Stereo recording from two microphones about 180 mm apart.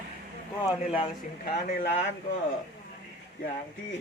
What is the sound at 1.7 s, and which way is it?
Speech, 40° left (ahead or behind).